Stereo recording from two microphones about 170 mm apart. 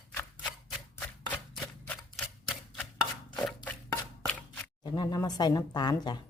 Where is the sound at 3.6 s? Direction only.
10° left (ahead or behind).